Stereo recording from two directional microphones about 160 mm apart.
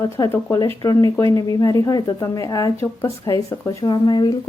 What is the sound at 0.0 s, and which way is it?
Speech, 25° left (ahead or behind).